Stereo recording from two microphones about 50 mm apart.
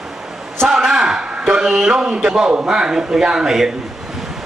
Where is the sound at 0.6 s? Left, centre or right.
Centre.